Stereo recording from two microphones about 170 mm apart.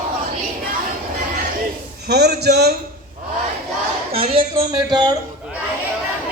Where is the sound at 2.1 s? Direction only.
75° right (ahead or behind).